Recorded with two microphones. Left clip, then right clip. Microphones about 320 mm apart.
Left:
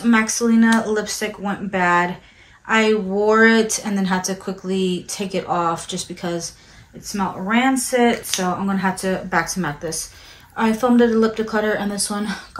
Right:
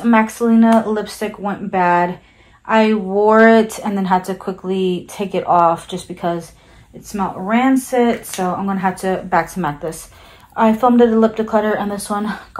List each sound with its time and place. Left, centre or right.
0.0 s speech: centre